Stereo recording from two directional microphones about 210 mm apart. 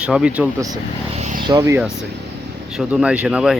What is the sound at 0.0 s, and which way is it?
Speech, 5° right (ahead or behind).